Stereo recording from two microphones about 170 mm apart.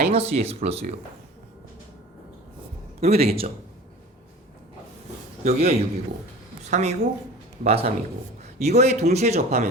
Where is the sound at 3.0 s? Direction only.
35° right (ahead or behind).